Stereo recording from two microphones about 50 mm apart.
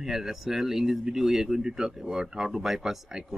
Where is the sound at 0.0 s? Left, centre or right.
Centre.